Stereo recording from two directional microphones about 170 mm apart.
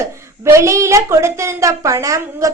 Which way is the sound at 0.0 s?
15° right (ahead or behind).